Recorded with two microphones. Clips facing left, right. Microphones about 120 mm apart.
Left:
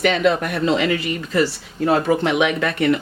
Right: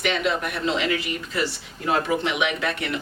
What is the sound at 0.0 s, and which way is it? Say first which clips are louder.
Speech: left 7 dB; 45° left (ahead or behind).